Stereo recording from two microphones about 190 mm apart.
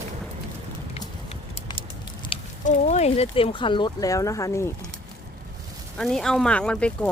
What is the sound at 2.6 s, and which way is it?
Speech, 35° left (ahead or behind).